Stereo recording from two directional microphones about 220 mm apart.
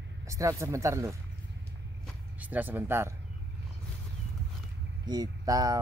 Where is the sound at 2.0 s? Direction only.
5° right (ahead or behind).